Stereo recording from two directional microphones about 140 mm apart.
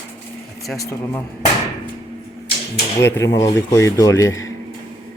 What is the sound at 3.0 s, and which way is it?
Speech, 20° left (ahead or behind).